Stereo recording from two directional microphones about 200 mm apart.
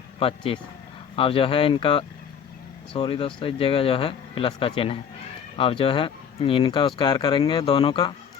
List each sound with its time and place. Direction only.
0.2 s speech: 25° left (ahead or behind)